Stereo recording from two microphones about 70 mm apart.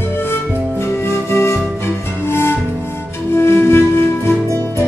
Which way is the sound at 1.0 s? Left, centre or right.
Left.